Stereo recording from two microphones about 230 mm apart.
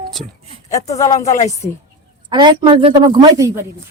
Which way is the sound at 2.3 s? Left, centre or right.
Centre.